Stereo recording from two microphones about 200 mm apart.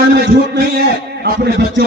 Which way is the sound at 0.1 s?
55° right (ahead or behind).